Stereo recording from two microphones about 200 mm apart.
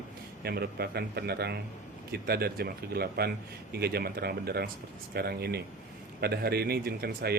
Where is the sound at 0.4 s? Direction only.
50° right (ahead or behind).